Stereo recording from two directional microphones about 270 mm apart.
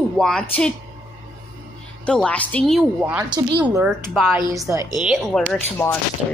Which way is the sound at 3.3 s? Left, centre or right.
Centre.